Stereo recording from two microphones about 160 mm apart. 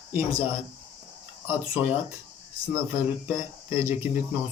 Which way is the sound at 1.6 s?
5° right (ahead or behind).